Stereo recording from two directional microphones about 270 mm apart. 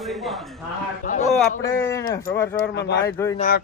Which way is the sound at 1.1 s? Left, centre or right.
Left.